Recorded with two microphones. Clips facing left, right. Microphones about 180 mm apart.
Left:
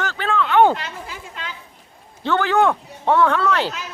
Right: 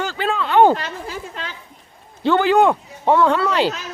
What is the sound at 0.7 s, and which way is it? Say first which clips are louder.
Speech: right 4 dB; 40° right (ahead or behind).